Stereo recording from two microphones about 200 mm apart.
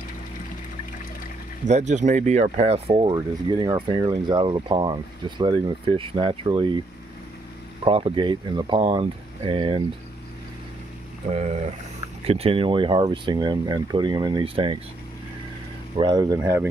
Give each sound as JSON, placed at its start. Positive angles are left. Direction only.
{"t": 1.6, "sound": "speech", "side_deg": -35}
{"t": 7.8, "sound": "speech", "side_deg": -25}
{"t": 11.2, "sound": "speech", "side_deg": -35}
{"t": 16.0, "sound": "speech", "side_deg": -20}
{"t": 16.3, "sound": "speech", "side_deg": -10}